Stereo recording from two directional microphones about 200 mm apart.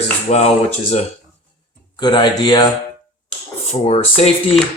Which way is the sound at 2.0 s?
20° left (ahead or behind).